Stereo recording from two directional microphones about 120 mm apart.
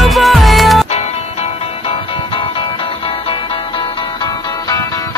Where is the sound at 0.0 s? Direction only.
Centre (ahead or behind).